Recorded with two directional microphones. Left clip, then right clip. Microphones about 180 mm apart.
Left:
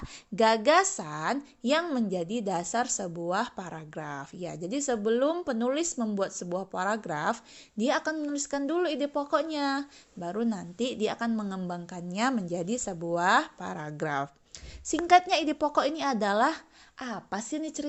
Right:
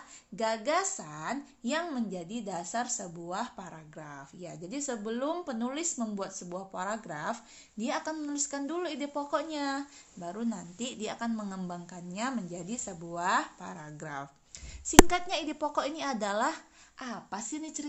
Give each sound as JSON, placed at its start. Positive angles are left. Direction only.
{"t": 0.3, "sound": "a woman's voice", "side_deg": 50}